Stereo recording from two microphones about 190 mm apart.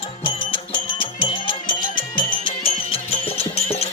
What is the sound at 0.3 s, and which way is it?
Music, 25° left (ahead or behind).